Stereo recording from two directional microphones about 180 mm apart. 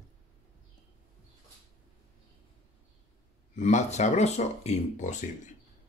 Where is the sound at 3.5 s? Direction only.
40° left (ahead or behind).